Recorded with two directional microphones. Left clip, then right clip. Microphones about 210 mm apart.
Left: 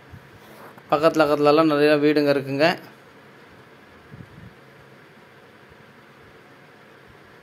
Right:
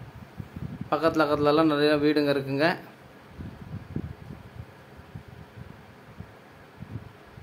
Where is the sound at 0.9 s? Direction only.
10° left (ahead or behind).